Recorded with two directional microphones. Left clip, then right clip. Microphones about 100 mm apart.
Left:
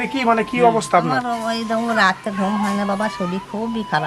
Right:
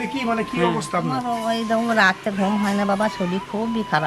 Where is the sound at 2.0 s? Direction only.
5° left (ahead or behind).